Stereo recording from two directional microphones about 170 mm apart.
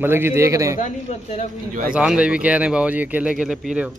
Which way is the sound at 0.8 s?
40° left (ahead or behind).